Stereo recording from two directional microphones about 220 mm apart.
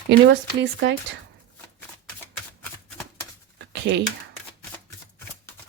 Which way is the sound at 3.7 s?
55° right (ahead or behind).